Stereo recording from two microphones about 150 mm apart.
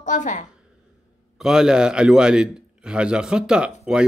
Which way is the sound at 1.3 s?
5° right (ahead or behind).